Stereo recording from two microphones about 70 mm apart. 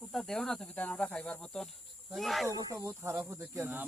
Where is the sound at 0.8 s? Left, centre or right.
Left.